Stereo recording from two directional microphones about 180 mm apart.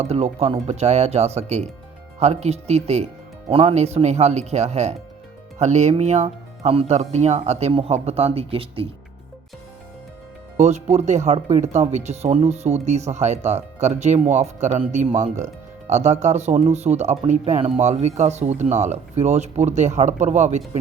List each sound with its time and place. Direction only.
0.0 s speech: 35° right (ahead or behind)
10.6 s speech: 40° right (ahead or behind)